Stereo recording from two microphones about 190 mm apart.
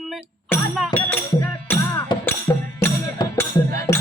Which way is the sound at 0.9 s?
20° left (ahead or behind).